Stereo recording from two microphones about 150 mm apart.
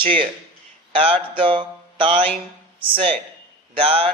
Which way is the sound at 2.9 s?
40° right (ahead or behind).